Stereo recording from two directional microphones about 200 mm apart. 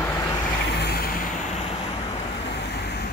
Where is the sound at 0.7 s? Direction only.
50° left (ahead or behind).